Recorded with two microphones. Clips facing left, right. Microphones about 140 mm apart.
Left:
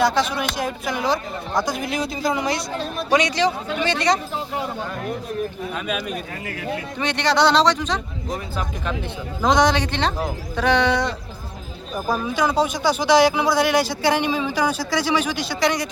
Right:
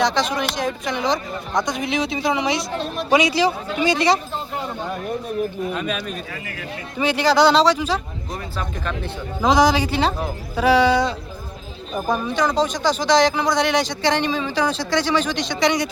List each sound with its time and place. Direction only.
0.0 s speech: 5° left (ahead or behind)
5.7 s speech: 5° left (ahead or behind)
7.0 s speech: 5° right (ahead or behind)
8.3 s speech: 20° left (ahead or behind)
9.4 s speech: centre (ahead or behind)